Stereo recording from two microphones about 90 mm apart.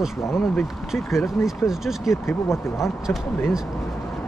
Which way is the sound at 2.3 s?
30° left (ahead or behind).